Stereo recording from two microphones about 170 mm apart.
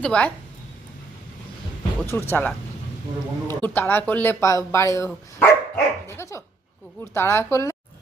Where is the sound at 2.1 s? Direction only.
15° left (ahead or behind).